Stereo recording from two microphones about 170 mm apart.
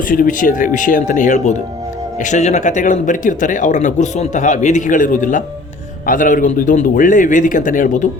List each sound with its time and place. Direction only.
0.1 s speech: 50° left (ahead or behind)